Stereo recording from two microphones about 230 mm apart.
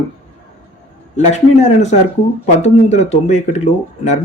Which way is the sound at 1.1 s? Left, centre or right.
Left.